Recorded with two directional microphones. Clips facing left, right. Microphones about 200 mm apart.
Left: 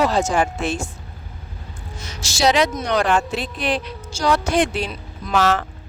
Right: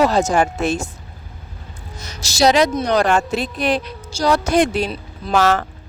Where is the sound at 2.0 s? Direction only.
40° right (ahead or behind).